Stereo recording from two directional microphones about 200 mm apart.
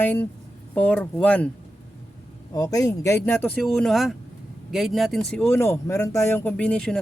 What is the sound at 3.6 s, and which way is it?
Speech, centre (ahead or behind).